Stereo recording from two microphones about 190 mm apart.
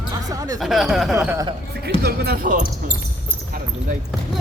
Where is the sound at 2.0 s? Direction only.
55° right (ahead or behind).